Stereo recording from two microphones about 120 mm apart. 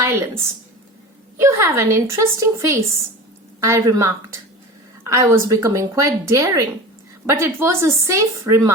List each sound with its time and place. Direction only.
0.0 s speech: 20° right (ahead or behind)